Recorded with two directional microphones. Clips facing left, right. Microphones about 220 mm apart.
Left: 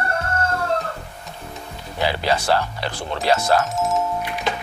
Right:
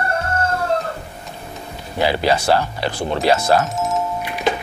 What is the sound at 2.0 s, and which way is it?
Speech, 10° right (ahead or behind).